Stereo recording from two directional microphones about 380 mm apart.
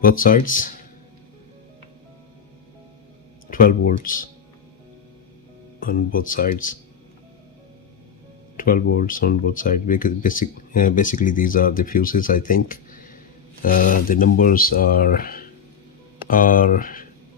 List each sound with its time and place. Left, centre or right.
0.0 s speech: left
3.4 s speech: left
5.8 s speech: left
8.5 s speech: left